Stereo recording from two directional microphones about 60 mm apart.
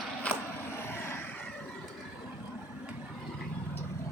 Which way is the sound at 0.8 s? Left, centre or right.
Left.